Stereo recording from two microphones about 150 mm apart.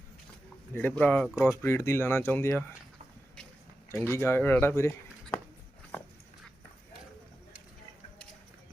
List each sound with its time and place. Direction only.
0.7 s speech: 15° left (ahead or behind)
3.9 s speech: 15° left (ahead or behind)